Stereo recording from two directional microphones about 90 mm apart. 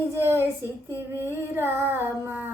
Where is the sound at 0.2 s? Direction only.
25° right (ahead or behind).